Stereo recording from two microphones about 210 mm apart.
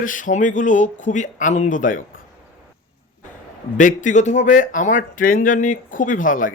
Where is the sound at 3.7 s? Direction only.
35° left (ahead or behind).